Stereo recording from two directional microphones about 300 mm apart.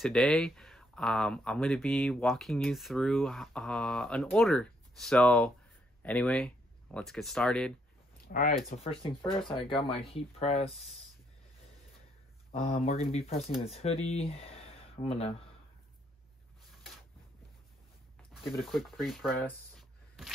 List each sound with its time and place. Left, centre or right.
0.0 s speech: centre
8.3 s speech: left
12.5 s speech: left
18.3 s speech: centre